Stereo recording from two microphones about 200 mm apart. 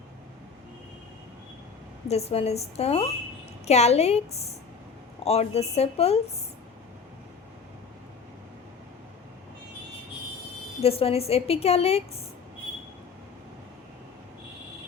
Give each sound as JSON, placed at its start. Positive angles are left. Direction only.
{"t": 2.0, "sound": "a woman's voice", "side_deg": 30}
{"t": 10.8, "sound": "a woman's voice", "side_deg": 30}